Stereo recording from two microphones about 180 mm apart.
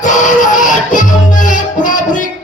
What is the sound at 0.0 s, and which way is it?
Music, 45° left (ahead or behind).